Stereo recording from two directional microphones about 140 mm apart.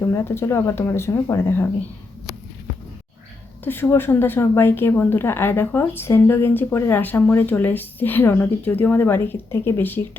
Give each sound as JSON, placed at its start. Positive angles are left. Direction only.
{"t": 0.0, "sound": "speech", "side_deg": 20}
{"t": 3.6, "sound": "speech", "side_deg": 15}